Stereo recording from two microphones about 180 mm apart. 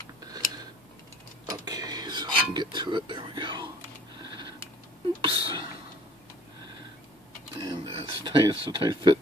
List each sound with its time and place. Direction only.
1.4 s a sound: 20° right (ahead or behind)
5.2 s speech: 30° right (ahead or behind)
7.5 s speech: 25° right (ahead or behind)